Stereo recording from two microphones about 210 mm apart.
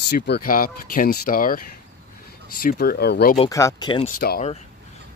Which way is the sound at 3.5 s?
15° left (ahead or behind).